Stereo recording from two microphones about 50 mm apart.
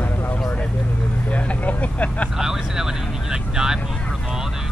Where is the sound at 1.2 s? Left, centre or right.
Left.